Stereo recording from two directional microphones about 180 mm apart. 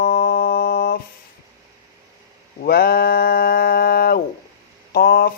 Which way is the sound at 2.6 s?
60° left (ahead or behind).